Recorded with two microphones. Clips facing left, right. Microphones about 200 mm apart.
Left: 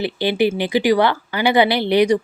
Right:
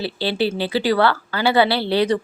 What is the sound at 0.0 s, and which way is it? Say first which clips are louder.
Speech: left 4 dB; 15° left (ahead or behind).